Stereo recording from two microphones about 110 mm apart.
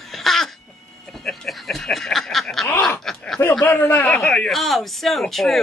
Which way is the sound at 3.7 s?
20° left (ahead or behind).